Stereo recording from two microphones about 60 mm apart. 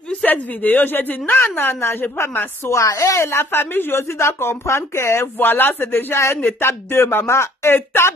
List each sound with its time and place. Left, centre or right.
0.2 s a woman's voice: left
2.8 s a woman's voice: left
3.3 s a woman's voice: left
5.4 s a woman's voice: left